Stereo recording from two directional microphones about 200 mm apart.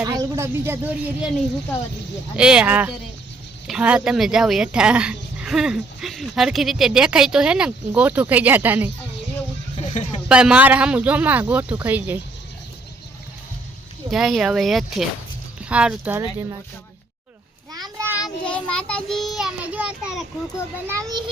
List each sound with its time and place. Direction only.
0.0 s speech: 20° right (ahead or behind)
2.3 s speech: 5° right (ahead or behind)
9.7 s a sound: 30° left (ahead or behind)
10.2 s a man's voice: 5° right (ahead or behind)
14.1 s a man's voice: centre (ahead or behind)
17.7 s child singing: 20° right (ahead or behind)
18.4 s speech: 5° left (ahead or behind)
20.8 s a man's voice: 15° right (ahead or behind)